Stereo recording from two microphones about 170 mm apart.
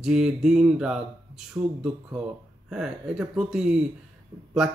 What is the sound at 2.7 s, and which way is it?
Speech, 5° right (ahead or behind).